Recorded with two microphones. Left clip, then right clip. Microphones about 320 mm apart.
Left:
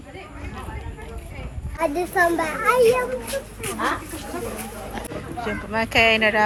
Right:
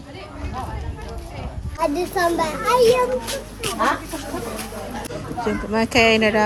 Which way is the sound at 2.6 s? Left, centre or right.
Centre.